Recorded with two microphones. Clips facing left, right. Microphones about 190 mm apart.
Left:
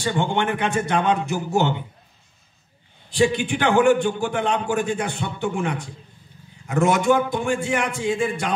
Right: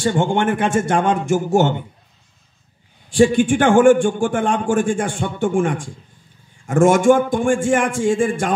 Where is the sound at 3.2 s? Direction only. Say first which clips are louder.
Right 6 dB; 45° right (ahead or behind).